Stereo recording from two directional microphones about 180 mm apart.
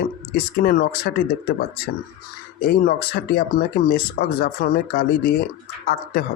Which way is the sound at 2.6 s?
55° left (ahead or behind).